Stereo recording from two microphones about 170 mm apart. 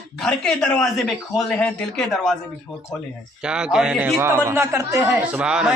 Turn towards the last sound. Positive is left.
turn(degrees=-5)  # may be behind; listen again after turning